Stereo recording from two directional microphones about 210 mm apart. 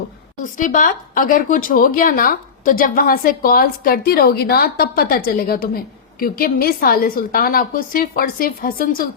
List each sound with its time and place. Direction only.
0.5 s a woman's voice: 40° left (ahead or behind)